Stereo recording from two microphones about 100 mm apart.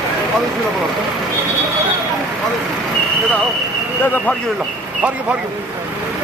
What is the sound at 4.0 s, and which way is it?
Speech, 20° left (ahead or behind).